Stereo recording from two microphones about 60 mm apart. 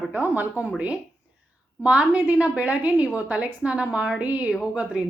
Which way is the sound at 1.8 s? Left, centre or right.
Right.